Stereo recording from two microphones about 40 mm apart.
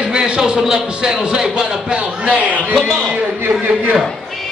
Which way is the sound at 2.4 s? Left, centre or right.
Right.